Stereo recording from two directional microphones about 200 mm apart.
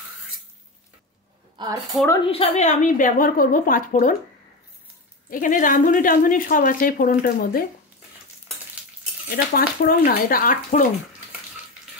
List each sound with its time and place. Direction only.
1.6 s a woman's voice: 25° right (ahead or behind)
2.2 s a woman's voice: 30° left (ahead or behind)
5.3 s a woman's voice: 40° left (ahead or behind)
9.3 s a woman's voice: 45° left (ahead or behind)